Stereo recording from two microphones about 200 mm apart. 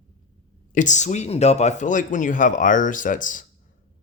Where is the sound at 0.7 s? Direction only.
40° left (ahead or behind).